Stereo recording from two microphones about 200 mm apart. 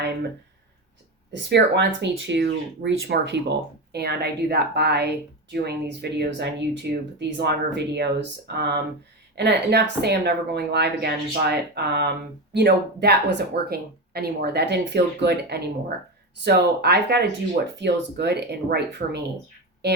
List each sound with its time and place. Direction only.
1.3 s a woman's voice: 60° right (ahead or behind)